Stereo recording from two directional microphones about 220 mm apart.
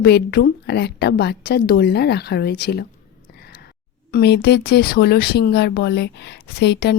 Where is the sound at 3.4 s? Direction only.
45° left (ahead or behind).